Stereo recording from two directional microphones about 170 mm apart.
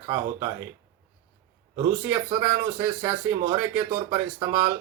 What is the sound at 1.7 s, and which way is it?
Speech, 15° right (ahead or behind).